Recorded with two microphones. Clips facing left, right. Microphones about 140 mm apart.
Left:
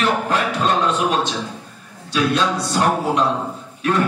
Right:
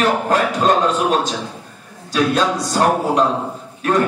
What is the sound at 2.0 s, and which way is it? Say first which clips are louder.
A man's voice: right 2 dB; 40° right (ahead or behind).